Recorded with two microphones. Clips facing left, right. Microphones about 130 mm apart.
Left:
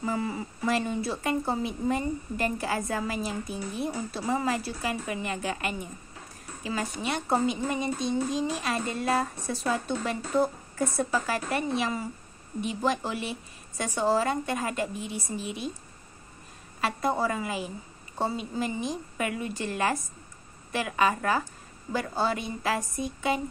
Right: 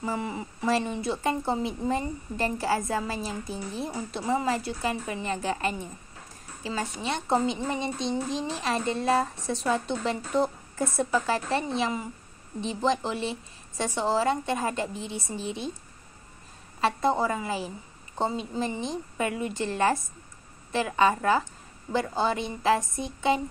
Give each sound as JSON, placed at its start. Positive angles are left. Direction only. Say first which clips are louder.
{"t": 0.0, "sound": "a woman's voice", "louder": "left 1 dB", "side_deg": -25}
{"t": 16.8, "sound": "a woman's voice", "louder": "right 2 dB", "side_deg": -25}